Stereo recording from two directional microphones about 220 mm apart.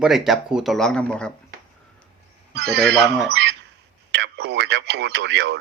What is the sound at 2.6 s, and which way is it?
Speech, 50° right (ahead or behind).